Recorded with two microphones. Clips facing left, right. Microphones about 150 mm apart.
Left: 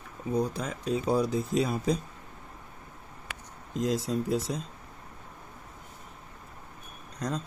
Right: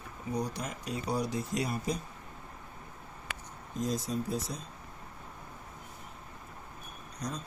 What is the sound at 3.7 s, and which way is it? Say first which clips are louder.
Speech: left 5 dB; 90° left.